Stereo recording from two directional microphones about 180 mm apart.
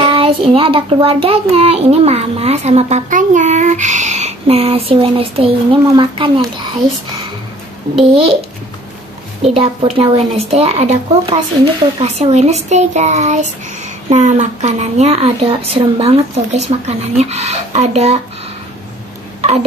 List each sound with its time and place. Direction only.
0.0 s child singing: 30° right (ahead or behind)
8.1 s a child's voice: 30° right (ahead or behind)
9.4 s child singing: 35° right (ahead or behind)